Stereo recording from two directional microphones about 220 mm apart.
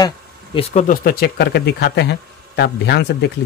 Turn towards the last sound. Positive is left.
turn(degrees=50)  # may be behind; listen again after turning